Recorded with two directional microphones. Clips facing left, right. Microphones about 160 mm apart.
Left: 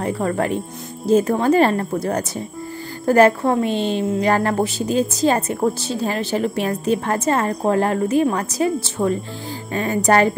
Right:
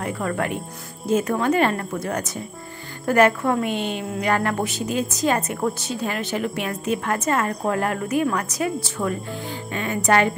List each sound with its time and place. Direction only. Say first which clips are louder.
0.0 s a woman's voice: left 4 dB; 30° left (ahead or behind)